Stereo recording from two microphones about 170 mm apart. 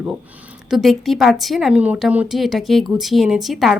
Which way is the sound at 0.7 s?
Centre (ahead or behind).